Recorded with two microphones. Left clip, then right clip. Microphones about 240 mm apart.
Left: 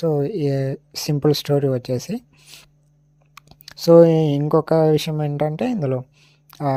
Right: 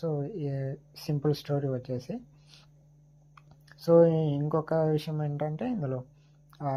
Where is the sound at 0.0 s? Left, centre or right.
Left.